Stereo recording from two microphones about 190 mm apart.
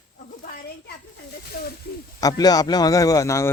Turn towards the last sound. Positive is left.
turn(degrees=15)  # may be behind; listen again after turning